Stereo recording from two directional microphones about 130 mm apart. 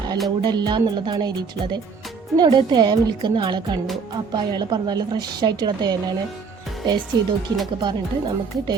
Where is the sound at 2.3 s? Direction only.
35° right (ahead or behind).